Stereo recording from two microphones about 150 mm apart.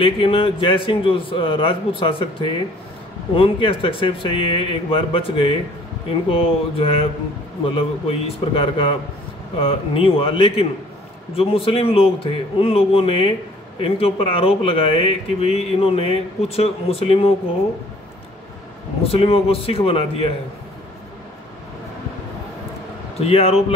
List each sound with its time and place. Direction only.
0.0 s speech: 35° left (ahead or behind)
19.0 s speech: 40° left (ahead or behind)
23.1 s speech: 45° left (ahead or behind)